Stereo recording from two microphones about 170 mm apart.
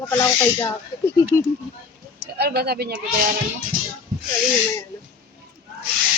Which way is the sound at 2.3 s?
70° right (ahead or behind).